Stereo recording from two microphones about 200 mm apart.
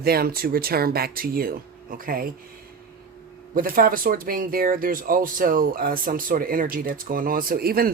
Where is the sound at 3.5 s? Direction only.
45° right (ahead or behind).